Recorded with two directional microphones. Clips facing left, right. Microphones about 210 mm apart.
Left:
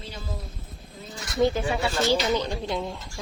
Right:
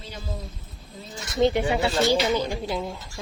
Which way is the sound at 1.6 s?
20° right (ahead or behind).